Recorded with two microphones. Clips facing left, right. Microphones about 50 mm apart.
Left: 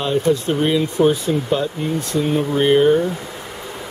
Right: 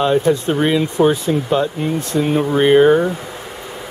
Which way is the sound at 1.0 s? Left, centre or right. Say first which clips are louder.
Right 2 dB; centre.